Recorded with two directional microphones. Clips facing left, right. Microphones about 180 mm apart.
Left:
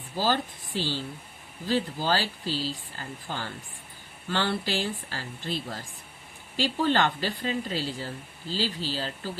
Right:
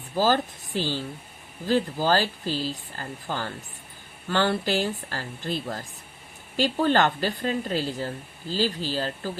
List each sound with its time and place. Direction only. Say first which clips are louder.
0.2 s speech: right 4 dB; 45° right (ahead or behind)